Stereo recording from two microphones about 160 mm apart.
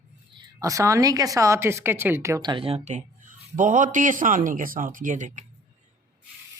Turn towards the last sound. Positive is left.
turn(degrees=-50)  # may be behind; listen again after turning